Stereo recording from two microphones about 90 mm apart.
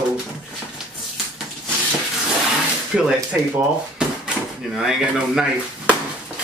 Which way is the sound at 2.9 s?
5° right (ahead or behind).